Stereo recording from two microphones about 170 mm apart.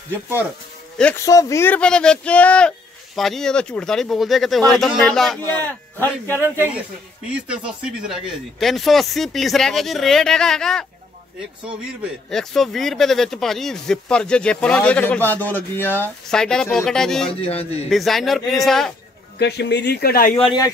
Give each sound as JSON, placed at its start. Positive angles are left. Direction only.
{"t": 0.1, "sound": "a man's voice", "side_deg": 15}
{"t": 7.2, "sound": "a man's voice", "side_deg": -5}
{"t": 17.3, "sound": "a man's voice", "side_deg": 35}
{"t": 17.8, "sound": "a man's voice", "side_deg": 0}
{"t": 19.3, "sound": "speech", "side_deg": 75}